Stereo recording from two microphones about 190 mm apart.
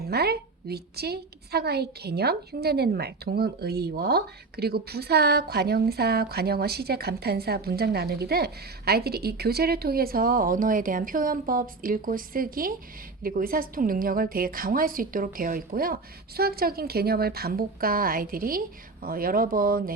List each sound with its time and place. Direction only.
0.0 s a woman's voice: 55° right (ahead or behind)